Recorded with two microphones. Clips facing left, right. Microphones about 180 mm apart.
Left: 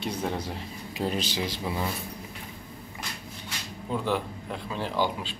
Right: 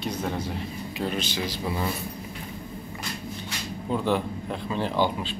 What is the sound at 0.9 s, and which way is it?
Speech, 35° left (ahead or behind).